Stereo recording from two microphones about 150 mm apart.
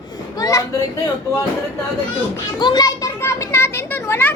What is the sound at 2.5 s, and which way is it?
Children playing, 30° left (ahead or behind).